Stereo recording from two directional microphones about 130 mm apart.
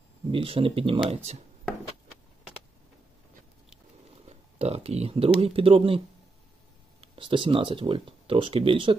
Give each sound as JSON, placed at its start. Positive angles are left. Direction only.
{"t": 0.3, "sound": "speech", "side_deg": -45}
{"t": 4.3, "sound": "speech", "side_deg": -55}